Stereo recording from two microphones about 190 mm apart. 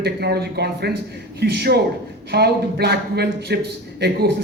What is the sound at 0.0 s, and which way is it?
A man's voice, 55° right (ahead or behind).